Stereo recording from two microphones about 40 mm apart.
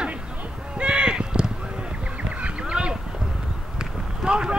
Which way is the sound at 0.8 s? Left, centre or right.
Right.